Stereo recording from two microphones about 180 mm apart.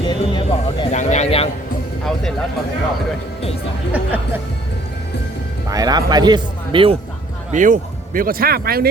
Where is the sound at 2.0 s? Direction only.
5° left (ahead or behind).